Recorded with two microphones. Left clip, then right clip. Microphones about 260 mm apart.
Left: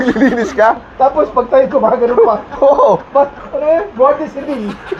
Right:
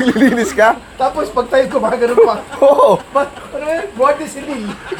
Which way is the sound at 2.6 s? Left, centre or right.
Right.